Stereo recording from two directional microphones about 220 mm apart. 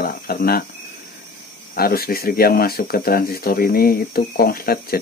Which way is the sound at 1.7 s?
45° left (ahead or behind).